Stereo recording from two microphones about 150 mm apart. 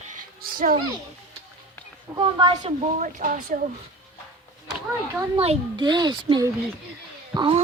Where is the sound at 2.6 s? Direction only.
55° right (ahead or behind).